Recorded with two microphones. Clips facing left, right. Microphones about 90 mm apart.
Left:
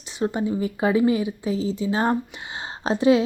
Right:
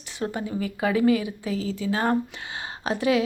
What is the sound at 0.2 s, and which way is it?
Speech, 25° left (ahead or behind).